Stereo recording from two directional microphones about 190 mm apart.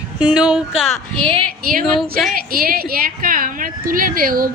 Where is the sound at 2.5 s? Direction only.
50° right (ahead or behind).